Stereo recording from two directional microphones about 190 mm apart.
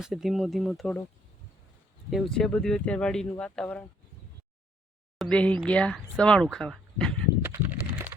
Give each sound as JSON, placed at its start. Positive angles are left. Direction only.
{"t": 0.0, "sound": "speech", "side_deg": 0}
{"t": 2.0, "sound": "speech", "side_deg": 0}
{"t": 5.1, "sound": "speech", "side_deg": 5}
{"t": 7.4, "sound": "a sound", "side_deg": -10}